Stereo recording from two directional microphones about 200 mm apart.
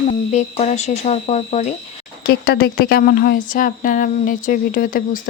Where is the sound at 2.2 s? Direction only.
50° left (ahead or behind).